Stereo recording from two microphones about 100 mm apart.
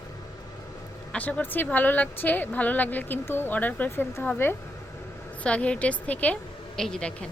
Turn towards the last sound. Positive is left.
turn(degrees=10)  # may be behind; listen again after turning